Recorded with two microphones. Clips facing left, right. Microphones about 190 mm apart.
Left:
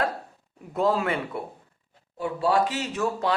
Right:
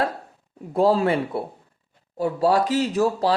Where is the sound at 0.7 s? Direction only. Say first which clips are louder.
Right 5 dB; 30° right (ahead or behind).